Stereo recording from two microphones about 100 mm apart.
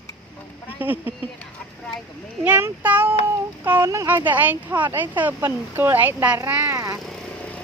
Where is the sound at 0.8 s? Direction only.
20° right (ahead or behind).